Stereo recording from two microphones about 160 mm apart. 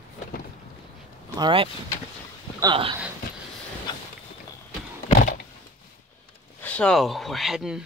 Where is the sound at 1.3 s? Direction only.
30° right (ahead or behind).